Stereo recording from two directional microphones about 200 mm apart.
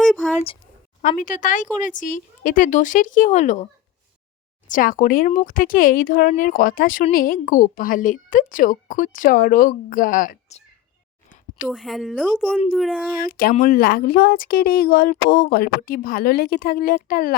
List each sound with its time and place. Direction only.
0.0 s a sound: centre (ahead or behind)
1.0 s speech: 40° left (ahead or behind)
4.7 s speech: 45° left (ahead or behind)
11.7 s a woman's voice: centre (ahead or behind)
13.1 s speech: 45° left (ahead or behind)